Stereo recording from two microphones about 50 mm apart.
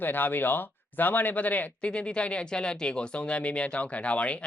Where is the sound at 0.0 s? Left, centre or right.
Left.